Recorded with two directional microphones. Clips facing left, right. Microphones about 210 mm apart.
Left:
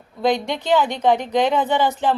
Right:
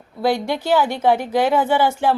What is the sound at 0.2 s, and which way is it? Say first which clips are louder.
A woman's voice: right 1 dB; 5° right (ahead or behind).